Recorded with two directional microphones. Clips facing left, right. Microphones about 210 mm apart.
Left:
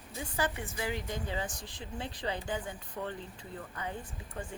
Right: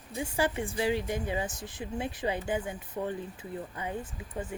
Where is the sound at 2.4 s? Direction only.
20° right (ahead or behind).